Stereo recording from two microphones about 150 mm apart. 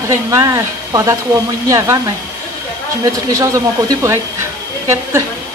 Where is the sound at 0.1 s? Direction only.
20° right (ahead or behind).